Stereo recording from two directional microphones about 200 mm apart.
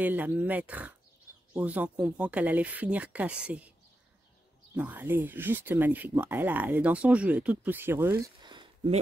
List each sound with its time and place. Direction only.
0.0 s speech: 10° right (ahead or behind)
4.7 s speech: 10° right (ahead or behind)
8.4 s a sound: 20° right (ahead or behind)